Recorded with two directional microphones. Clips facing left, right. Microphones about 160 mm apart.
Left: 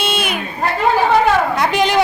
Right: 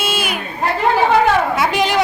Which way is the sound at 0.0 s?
5° right (ahead or behind).